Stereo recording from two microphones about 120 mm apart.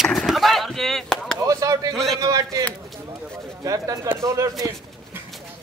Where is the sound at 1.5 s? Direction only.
30° right (ahead or behind).